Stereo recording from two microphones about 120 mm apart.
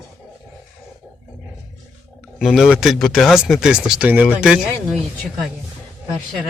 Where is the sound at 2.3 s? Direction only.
Centre (ahead or behind).